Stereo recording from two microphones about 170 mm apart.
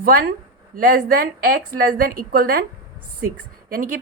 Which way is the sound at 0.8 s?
60° right (ahead or behind).